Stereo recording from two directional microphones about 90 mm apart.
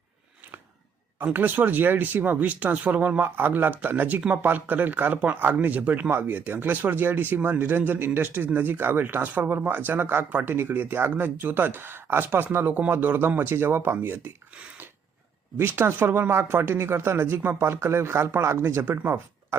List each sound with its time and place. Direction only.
1.2 s speech: 20° right (ahead or behind)